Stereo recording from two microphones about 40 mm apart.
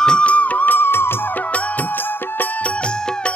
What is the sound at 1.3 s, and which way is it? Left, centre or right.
Music, left.